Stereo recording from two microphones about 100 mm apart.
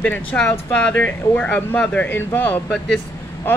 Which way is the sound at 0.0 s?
15° left (ahead or behind).